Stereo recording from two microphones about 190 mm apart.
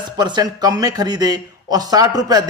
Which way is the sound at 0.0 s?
25° right (ahead or behind).